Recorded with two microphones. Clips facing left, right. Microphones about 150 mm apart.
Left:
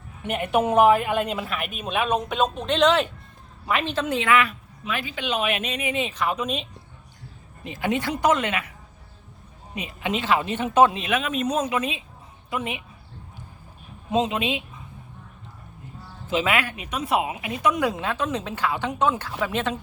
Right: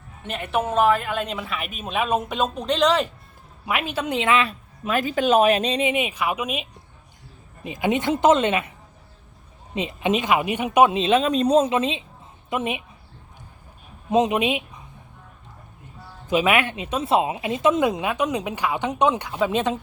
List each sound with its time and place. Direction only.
0.2 s a woman's voice: 15° left (ahead or behind); by 4.5 s 25° right (ahead or behind)
4.8 s speech: 45° right (ahead or behind)
5.9 s speech: 15° right (ahead or behind)
9.7 s speech: 20° right (ahead or behind)
14.1 s speech: 20° right (ahead or behind)
16.3 s speech: 20° right (ahead or behind)